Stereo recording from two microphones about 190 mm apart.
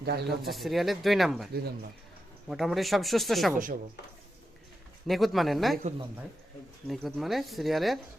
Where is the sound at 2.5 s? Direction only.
Centre (ahead or behind).